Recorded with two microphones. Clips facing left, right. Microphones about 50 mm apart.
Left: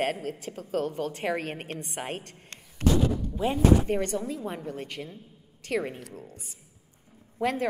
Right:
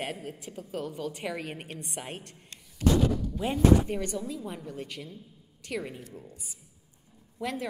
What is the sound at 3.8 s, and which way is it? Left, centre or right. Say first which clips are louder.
Speech: left 4 dB; left.